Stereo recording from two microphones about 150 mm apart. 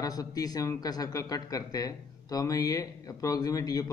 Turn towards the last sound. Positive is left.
turn(degrees=25)  # may be behind; listen again after turning